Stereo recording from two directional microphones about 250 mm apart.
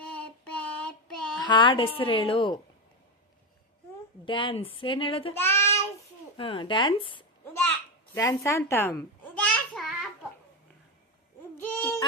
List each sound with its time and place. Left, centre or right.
0.1 s child singing: centre
1.4 s speech: centre
4.3 s speech: centre
5.3 s child singing: centre
6.3 s a woman's voice: left
8.7 s a sound: centre
11.5 s owl: centre